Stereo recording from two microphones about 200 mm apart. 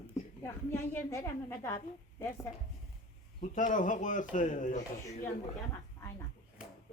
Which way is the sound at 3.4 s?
40° left (ahead or behind).